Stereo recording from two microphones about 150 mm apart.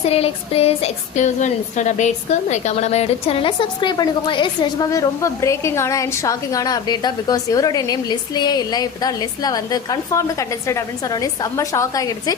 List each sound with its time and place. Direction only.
0.0 s a woman's voice: 40° left (ahead or behind); by 12.4 s 25° left (ahead or behind)